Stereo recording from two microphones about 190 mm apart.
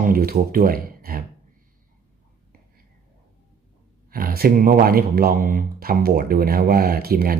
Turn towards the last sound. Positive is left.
turn(degrees=-55)  # may be behind; listen again after turning